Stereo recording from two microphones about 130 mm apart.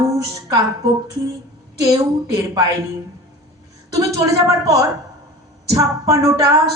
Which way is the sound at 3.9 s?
25° right (ahead or behind).